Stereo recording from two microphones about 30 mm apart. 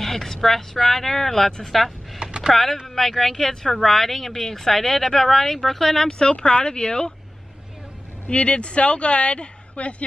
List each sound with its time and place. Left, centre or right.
0.0 s speech: centre
2.2 s typing: right
2.5 s speech: centre
5.9 s speech: left
6.2 s speech: left
8.3 s speech: left